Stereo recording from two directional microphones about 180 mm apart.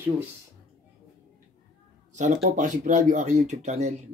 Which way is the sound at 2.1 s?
40° right (ahead or behind).